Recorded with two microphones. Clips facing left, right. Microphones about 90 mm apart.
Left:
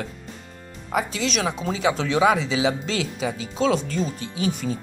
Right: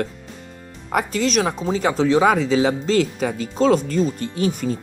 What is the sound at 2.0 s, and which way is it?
Speech, 40° right (ahead or behind).